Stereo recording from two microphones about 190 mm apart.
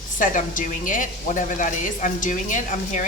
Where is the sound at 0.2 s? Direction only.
45° left (ahead or behind).